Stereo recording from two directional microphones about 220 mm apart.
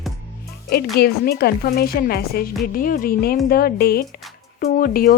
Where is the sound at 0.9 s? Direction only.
45° left (ahead or behind).